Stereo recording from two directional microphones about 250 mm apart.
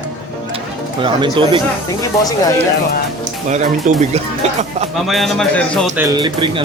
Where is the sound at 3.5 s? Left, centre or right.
Right.